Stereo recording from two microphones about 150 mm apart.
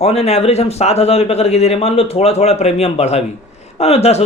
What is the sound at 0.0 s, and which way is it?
Speech, 45° left (ahead or behind).